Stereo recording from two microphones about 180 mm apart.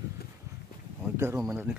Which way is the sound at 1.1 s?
15° right (ahead or behind).